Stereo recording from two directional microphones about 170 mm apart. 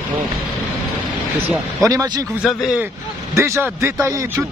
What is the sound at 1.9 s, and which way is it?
Speech, 20° right (ahead or behind).